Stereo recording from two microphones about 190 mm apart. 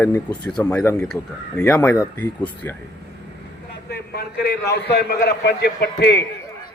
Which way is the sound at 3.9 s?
55° left (ahead or behind).